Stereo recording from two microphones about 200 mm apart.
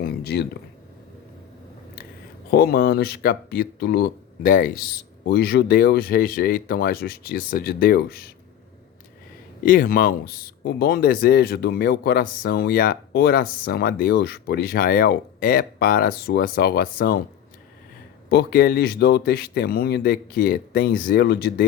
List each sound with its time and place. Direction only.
0.0 s a sound: 55° left (ahead or behind)
2.5 s speech: 50° left (ahead or behind)
9.6 s speech: 45° left (ahead or behind)
18.3 s speech: 50° left (ahead or behind)